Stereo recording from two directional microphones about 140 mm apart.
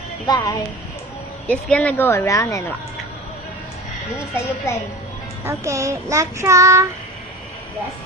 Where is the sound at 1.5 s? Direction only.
10° left (ahead or behind).